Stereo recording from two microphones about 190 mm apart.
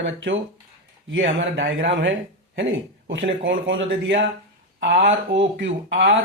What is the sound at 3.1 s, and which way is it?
Speech, 75° right (ahead or behind).